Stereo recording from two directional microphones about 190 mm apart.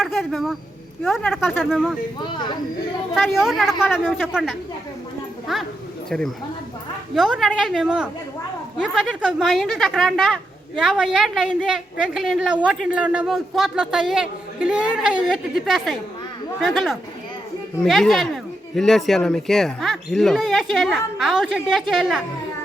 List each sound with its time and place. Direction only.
0.0 s speech: centre (ahead or behind)
2.2 s a man's voice: 25° left (ahead or behind)
3.2 s speech: centre (ahead or behind)